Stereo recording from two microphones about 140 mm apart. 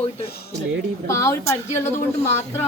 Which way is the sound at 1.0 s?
20° left (ahead or behind).